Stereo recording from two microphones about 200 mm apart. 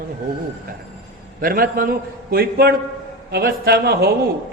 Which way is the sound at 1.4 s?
45° right (ahead or behind).